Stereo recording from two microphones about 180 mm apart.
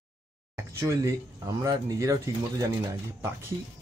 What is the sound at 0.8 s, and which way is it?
Speech, 15° right (ahead or behind).